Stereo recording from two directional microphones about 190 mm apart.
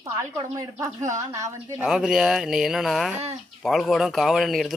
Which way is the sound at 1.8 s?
5° right (ahead or behind).